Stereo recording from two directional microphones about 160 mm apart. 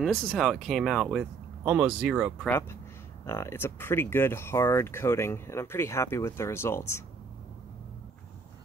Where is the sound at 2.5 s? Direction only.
15° left (ahead or behind).